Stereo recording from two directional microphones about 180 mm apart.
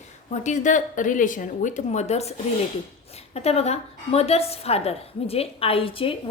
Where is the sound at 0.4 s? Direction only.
45° left (ahead or behind).